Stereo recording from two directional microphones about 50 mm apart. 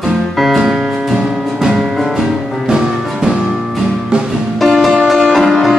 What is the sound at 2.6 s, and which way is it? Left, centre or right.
Music, centre.